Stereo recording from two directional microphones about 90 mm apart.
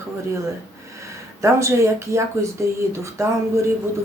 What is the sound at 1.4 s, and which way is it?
Speech, 35° right (ahead or behind).